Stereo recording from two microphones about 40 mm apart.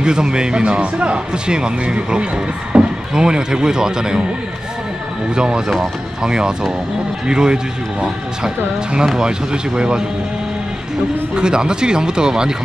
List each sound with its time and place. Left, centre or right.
0.0 s speech: centre
5.3 s speech: centre
9.2 s speech: right
11.3 s speech: right